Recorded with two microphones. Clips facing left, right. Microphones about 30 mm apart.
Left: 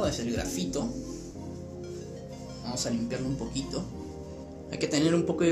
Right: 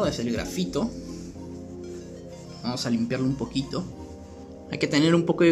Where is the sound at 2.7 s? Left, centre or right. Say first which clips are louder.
Right 5 dB; right.